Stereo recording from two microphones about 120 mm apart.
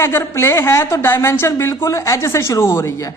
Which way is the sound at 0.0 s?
20° left (ahead or behind).